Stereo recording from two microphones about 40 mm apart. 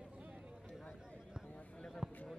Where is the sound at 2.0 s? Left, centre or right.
Centre.